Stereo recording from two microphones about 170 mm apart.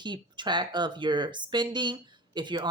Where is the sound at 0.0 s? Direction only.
25° right (ahead or behind).